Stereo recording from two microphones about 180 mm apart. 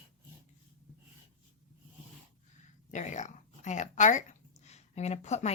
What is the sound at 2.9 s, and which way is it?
Speech, 40° left (ahead or behind).